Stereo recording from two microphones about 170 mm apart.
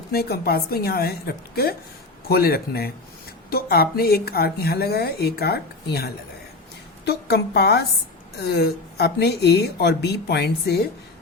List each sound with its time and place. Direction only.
0.1 s a woman's voice: 65° left (ahead or behind)